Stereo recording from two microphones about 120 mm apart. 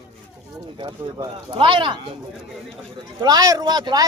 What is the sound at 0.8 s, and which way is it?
Speech, 35° right (ahead or behind).